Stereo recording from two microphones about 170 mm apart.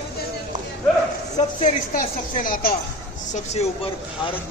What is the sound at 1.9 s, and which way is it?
Speech, 55° left (ahead or behind).